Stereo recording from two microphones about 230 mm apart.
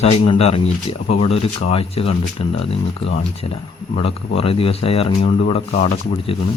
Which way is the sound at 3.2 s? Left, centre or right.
Left.